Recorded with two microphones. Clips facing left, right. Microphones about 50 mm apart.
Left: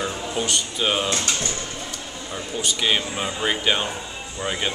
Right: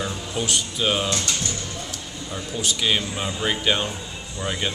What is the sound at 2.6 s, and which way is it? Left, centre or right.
Speech, centre.